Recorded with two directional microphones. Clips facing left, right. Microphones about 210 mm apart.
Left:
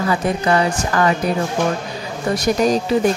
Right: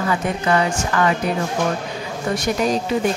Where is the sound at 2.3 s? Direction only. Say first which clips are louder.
Left 4 dB; 40° left (ahead or behind).